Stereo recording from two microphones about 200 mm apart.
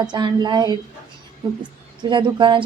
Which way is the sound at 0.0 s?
20° right (ahead or behind).